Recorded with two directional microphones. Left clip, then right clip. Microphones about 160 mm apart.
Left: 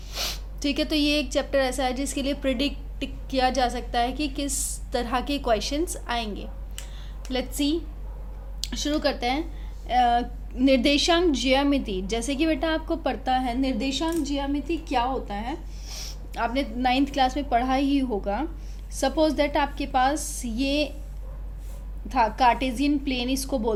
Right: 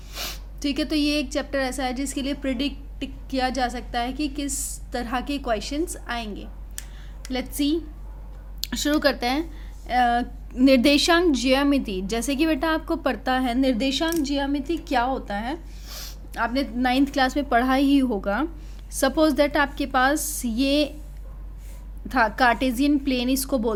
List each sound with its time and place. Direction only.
0.1 s a woman's voice: 15° right (ahead or behind)
8.6 s a woman's voice: 50° right (ahead or behind)
22.1 s a woman's voice: 50° right (ahead or behind)